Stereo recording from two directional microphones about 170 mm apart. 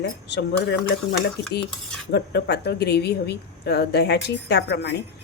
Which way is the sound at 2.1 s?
75° left (ahead or behind).